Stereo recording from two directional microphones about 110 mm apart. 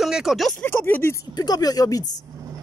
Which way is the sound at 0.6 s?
20° left (ahead or behind).